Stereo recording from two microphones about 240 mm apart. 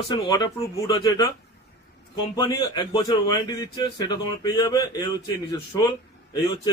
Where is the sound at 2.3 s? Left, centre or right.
Centre.